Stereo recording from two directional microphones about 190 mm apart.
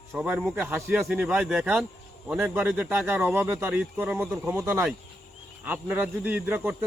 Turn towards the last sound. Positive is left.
turn(degrees=-10)  # may be behind; listen again after turning